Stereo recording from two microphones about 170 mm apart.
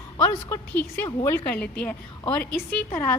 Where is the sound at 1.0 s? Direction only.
15° left (ahead or behind).